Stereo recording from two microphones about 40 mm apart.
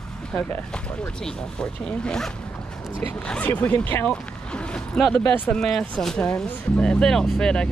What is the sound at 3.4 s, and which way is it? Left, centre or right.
Speech, left.